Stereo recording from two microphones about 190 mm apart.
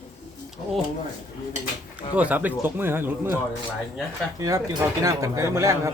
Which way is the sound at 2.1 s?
10° right (ahead or behind).